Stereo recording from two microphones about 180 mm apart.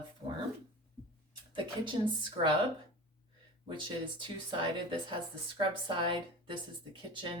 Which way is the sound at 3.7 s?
25° right (ahead or behind).